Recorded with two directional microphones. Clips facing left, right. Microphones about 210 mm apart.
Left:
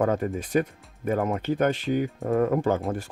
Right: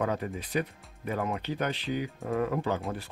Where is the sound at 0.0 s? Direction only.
45° left (ahead or behind).